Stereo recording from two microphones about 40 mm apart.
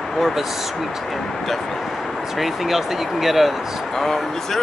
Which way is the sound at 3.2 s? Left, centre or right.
Centre.